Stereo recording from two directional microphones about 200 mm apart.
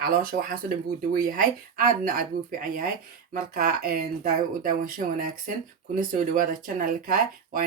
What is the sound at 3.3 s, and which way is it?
Speech, 45° right (ahead or behind).